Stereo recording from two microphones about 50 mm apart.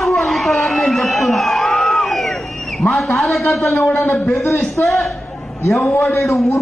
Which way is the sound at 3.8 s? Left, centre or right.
Left.